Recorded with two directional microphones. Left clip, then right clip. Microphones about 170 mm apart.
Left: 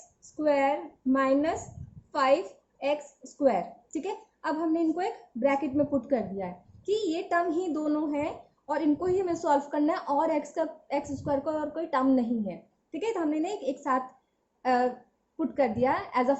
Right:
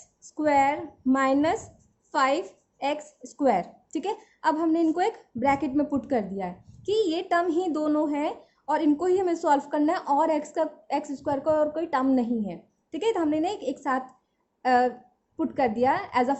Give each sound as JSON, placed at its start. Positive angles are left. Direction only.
{"t": 0.3, "sound": "a woman's voice", "side_deg": -55}
{"t": 14.6, "sound": "a sound", "side_deg": -40}
{"t": 15.4, "sound": "a woman's voice", "side_deg": -40}